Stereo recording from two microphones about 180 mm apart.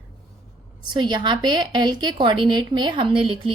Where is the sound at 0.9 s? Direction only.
25° right (ahead or behind).